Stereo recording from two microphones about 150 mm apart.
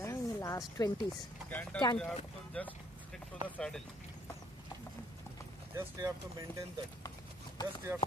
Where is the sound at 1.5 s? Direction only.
10° left (ahead or behind).